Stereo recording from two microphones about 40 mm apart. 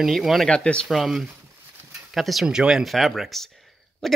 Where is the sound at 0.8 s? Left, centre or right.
Centre.